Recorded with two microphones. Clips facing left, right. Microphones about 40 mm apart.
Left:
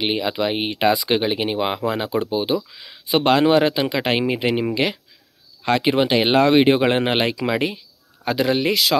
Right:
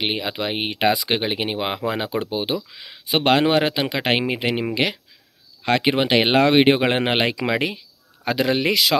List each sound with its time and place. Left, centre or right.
0.0 s speech: right
5.7 s speech: right
8.3 s speech: right